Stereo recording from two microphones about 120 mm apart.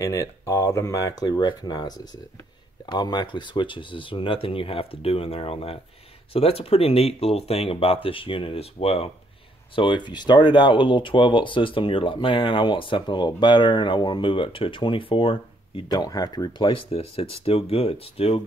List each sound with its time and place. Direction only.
0.0 s speech: 25° left (ahead or behind); by 9.1 s 55° left (ahead or behind)
9.8 s speech: 40° left (ahead or behind)
15.9 s speech: 30° left (ahead or behind)
16.9 s speech: 55° left (ahead or behind)